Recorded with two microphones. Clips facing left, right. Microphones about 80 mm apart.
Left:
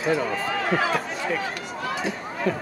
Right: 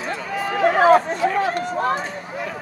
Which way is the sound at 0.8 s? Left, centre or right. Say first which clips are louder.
Right 11 dB; right.